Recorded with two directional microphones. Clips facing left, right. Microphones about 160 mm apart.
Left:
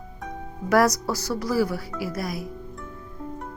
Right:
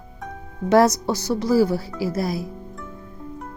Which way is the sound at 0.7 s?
25° right (ahead or behind).